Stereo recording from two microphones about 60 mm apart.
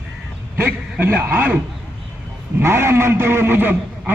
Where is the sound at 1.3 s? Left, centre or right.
Right.